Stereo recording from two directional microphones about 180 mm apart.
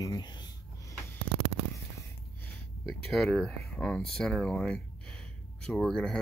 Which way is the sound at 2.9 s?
Centre (ahead or behind).